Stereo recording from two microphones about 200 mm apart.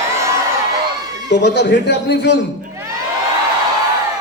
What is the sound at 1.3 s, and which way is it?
A man's voice, 60° left (ahead or behind).